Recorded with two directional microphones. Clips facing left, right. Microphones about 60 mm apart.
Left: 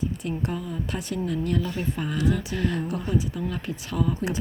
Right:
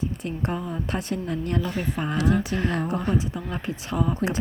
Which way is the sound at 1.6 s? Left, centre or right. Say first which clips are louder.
Right 1 dB; right.